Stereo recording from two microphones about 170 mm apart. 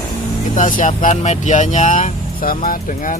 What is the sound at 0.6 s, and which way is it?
Speech, 50° left (ahead or behind).